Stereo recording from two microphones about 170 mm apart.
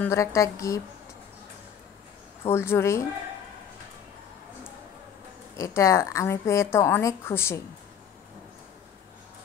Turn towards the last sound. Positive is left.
turn(degrees=15)  # may be behind; listen again after turning